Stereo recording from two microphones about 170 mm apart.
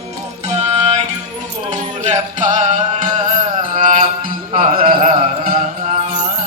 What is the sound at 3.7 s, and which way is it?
Mantra, 50° right (ahead or behind).